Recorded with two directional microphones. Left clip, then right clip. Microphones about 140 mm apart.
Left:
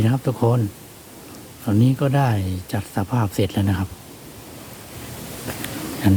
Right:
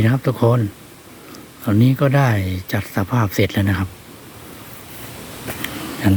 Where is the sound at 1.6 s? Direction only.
15° right (ahead or behind).